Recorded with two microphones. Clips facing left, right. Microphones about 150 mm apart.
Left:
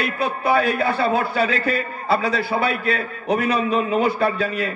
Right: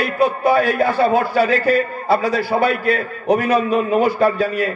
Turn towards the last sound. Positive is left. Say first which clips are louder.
# right 4 dB
turn(degrees=-40)  # may be behind; listen again after turning